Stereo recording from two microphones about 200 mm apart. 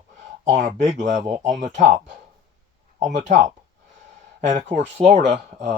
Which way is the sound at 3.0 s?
40° right (ahead or behind).